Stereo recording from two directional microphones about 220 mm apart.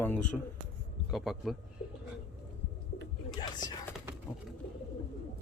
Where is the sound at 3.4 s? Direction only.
15° left (ahead or behind).